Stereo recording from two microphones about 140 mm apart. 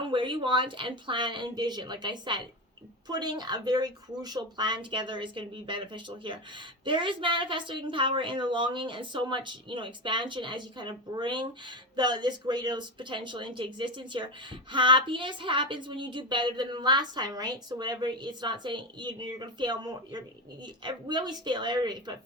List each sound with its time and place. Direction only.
0.0 s a woman's voice: 35° right (ahead or behind)